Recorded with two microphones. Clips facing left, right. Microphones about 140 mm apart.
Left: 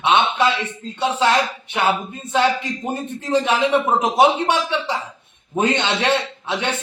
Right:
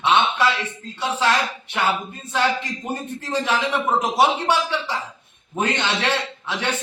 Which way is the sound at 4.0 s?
20° left (ahead or behind).